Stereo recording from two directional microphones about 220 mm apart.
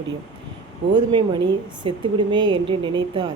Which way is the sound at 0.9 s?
20° right (ahead or behind).